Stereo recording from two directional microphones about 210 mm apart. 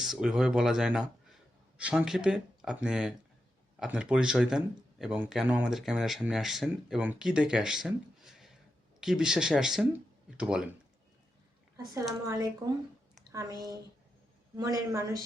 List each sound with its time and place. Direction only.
0.0 s speech: centre (ahead or behind)
12.2 s a woman's voice: 15° right (ahead or behind)